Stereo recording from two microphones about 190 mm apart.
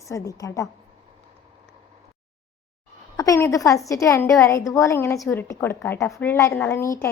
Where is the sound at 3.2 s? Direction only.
15° left (ahead or behind).